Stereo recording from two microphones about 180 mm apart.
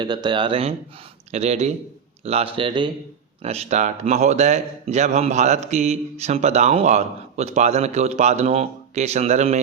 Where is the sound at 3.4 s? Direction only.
35° right (ahead or behind).